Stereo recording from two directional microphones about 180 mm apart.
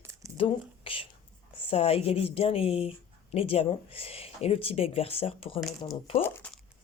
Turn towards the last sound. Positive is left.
turn(degrees=10)  # may be behind; listen again after turning